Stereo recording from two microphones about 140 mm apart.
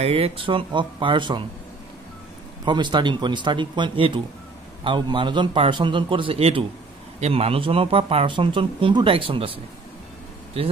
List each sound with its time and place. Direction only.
0.0 s speech: 45° right (ahead or behind)
2.6 s speech: 35° right (ahead or behind)